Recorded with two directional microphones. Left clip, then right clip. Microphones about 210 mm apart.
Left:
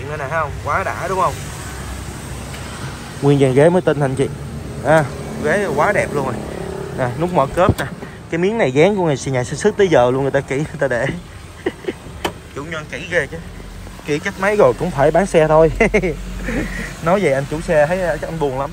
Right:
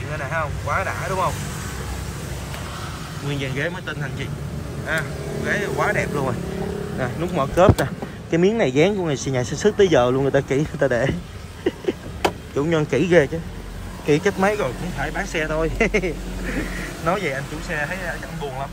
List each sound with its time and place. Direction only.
0.1 s speech: centre (ahead or behind)
3.3 s speech: centre (ahead or behind)
5.4 s speech: centre (ahead or behind)
7.5 s speech: 15° right (ahead or behind)
11.7 s vehicle: 10° right (ahead or behind)
12.6 s speech: 25° right (ahead or behind)
14.5 s speech: centre (ahead or behind)